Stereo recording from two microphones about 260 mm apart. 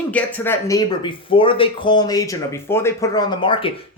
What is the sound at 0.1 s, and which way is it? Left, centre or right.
Speech, centre.